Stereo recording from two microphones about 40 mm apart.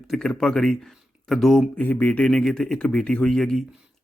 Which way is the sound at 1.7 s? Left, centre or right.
Left.